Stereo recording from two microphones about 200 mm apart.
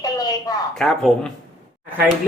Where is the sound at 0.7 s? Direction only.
Centre (ahead or behind).